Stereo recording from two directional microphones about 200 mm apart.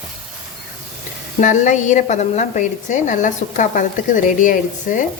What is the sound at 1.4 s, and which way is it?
A woman's voice, 40° left (ahead or behind).